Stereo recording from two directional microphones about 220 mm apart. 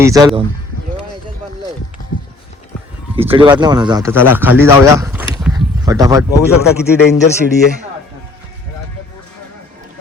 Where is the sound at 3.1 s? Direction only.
25° right (ahead or behind); by 5.3 s 10° right (ahead or behind).